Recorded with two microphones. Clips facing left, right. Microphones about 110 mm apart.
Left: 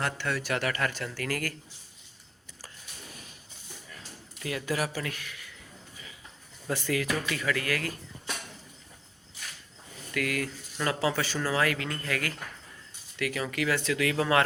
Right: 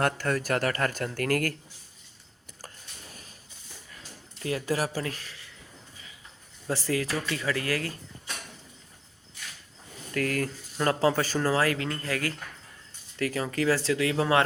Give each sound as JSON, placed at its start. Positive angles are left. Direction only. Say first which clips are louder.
{"t": 0.0, "sound": "speech", "louder": "right 5 dB", "side_deg": -45}
{"t": 2.6, "sound": "a sound", "louder": "right 1 dB", "side_deg": -40}
{"t": 4.4, "sound": "speech", "louder": "right 2 dB", "side_deg": -35}
{"t": 6.7, "sound": "speech", "louder": "right 1 dB", "side_deg": -30}
{"t": 10.2, "sound": "speech", "louder": "right 3 dB", "side_deg": -40}